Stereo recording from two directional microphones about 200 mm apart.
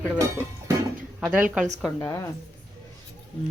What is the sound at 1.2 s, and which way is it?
Speech, 5° right (ahead or behind).